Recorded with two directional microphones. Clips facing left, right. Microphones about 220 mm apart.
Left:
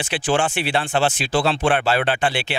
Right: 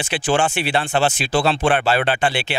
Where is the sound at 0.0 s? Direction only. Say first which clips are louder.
Right 1 dB; 15° right (ahead or behind).